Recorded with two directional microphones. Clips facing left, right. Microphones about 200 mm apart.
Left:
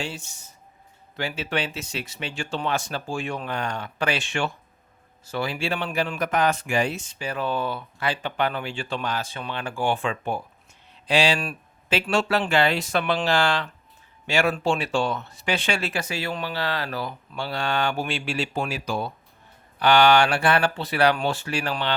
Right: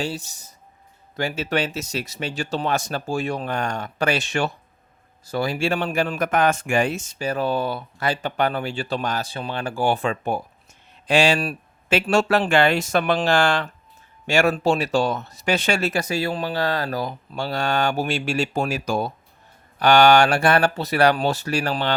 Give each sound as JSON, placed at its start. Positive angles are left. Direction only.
{"t": 0.0, "sound": "speech", "side_deg": -35}